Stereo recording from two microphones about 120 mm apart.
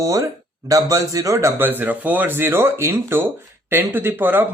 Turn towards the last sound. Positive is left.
turn(degrees=-15)  # may be behind; listen again after turning